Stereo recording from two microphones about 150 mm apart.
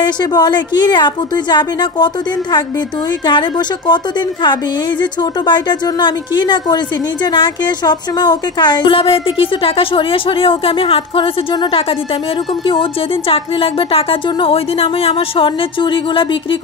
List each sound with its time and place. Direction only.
0.0 s a woman's voice: 25° left (ahead or behind)
3.3 s a woman's voice: 30° left (ahead or behind)